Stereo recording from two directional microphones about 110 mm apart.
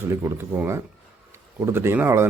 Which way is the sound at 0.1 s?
25° right (ahead or behind).